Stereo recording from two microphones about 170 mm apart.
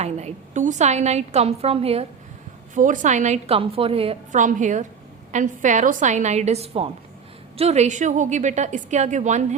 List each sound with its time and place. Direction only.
0.0 s a woman's voice: 40° right (ahead or behind)
2.7 s a woman's voice: 50° right (ahead or behind)
4.4 s a woman's voice: 50° right (ahead or behind)